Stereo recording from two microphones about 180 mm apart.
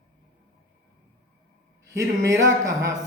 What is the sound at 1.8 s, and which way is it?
Speech, 20° right (ahead or behind).